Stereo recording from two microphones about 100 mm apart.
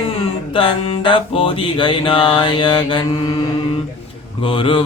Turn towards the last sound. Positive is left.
turn(degrees=60)  # may be behind; listen again after turning